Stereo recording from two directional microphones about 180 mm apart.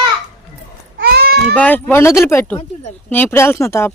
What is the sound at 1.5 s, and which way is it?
Speech, 10° left (ahead or behind).